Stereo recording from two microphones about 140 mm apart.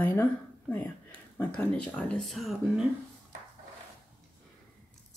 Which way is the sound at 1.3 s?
10° left (ahead or behind).